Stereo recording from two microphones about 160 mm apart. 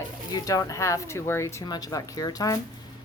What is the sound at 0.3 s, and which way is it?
A woman's voice, 20° left (ahead or behind).